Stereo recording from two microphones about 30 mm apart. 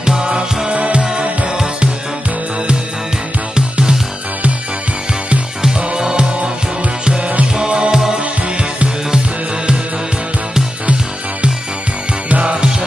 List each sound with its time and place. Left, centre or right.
0.0 s music: right
0.7 s music: right
3.5 s music: right
5.9 s music: right
7.5 s music: right
12.3 s music: right